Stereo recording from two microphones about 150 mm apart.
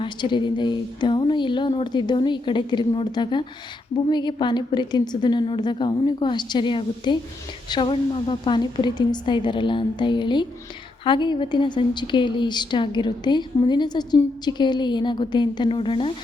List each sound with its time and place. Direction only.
0.0 s a woman's voice: 30° left (ahead or behind)